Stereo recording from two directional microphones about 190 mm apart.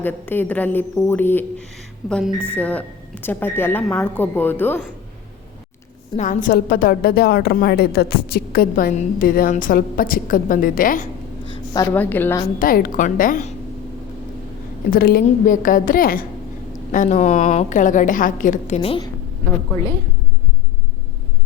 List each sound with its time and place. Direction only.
0.0 s a woman's voice: 10° left (ahead or behind)
6.1 s a woman's voice: 45° left (ahead or behind)
11.7 s a woman's voice: 15° left (ahead or behind)
12.5 s a woman's voice: 50° left (ahead or behind)
14.8 s a woman's voice: 50° left (ahead or behind); by 19.0 s 30° left (ahead or behind)